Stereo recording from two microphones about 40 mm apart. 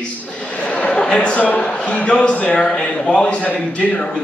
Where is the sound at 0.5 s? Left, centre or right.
Left.